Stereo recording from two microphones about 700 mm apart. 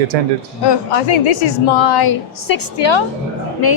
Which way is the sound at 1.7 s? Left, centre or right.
Left.